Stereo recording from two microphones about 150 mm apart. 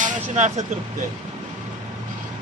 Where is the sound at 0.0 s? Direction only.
55° right (ahead or behind).